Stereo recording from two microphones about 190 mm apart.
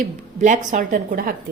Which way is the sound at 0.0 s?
40° right (ahead or behind).